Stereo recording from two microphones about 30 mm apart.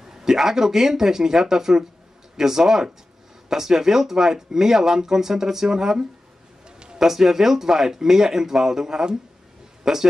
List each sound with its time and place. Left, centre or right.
0.0 s speech: centre